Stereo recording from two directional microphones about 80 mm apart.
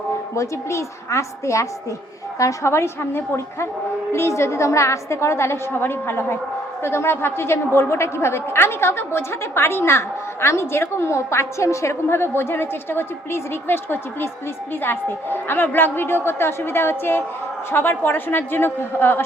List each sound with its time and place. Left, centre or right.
0.3 s a woman's voice: left